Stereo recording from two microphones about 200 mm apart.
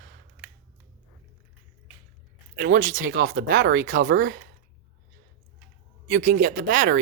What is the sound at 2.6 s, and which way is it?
Speech, 40° right (ahead or behind).